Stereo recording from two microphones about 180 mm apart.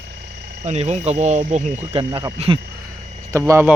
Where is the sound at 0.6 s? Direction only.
40° right (ahead or behind).